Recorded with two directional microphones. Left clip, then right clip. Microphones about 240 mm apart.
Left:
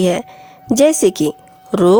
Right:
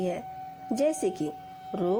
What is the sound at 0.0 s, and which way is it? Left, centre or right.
A woman's voice, left.